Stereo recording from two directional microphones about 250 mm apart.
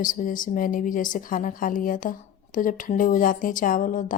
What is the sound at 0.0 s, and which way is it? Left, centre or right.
Speech, left.